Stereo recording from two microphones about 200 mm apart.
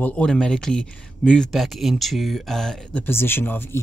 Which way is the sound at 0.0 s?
5° left (ahead or behind).